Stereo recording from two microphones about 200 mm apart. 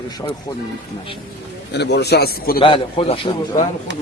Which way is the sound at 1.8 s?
55° left (ahead or behind).